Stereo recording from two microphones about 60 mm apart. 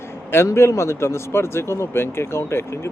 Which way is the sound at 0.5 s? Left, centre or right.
Left.